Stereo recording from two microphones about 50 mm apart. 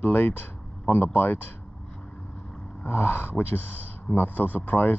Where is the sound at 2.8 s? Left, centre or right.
Left.